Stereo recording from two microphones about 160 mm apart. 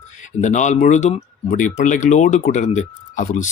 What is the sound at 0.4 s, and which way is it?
Speech, 50° left (ahead or behind).